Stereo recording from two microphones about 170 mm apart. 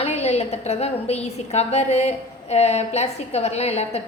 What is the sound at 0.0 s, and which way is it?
A woman's voice, 40° left (ahead or behind).